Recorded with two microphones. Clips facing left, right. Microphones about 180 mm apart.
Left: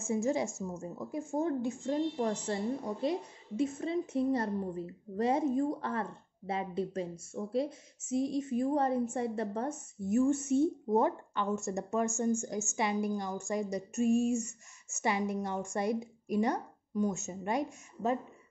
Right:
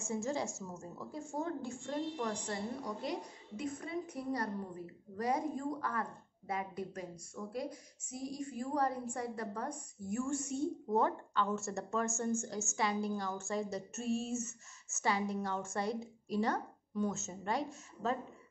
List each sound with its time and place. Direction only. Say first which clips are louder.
0.0 s a woman's voice: left 6 dB; 20° left (ahead or behind)